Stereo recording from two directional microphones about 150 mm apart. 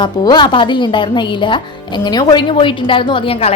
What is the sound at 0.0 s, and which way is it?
A woman's voice, 30° left (ahead or behind).